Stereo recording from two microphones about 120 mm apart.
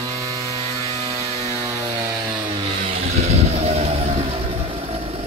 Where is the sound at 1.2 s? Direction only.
30° right (ahead or behind).